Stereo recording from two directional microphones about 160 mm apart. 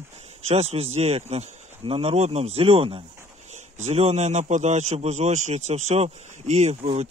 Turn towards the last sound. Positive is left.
turn(degrees=-40)  # may be behind; listen again after turning